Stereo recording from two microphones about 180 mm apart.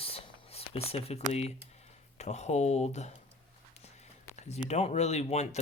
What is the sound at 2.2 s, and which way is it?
Speech, 40° left (ahead or behind).